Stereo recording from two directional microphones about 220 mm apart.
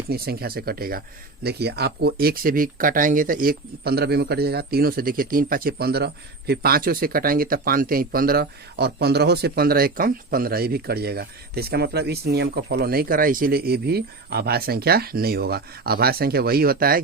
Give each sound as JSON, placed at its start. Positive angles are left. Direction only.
{"t": 0.1, "sound": "speech", "side_deg": -45}